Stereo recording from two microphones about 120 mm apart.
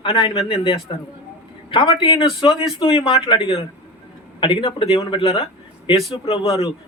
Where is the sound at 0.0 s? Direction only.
45° left (ahead or behind).